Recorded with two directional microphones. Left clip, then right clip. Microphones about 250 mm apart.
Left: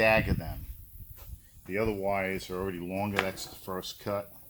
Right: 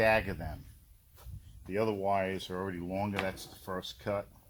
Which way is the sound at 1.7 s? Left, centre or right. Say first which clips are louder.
Left 1 dB; right.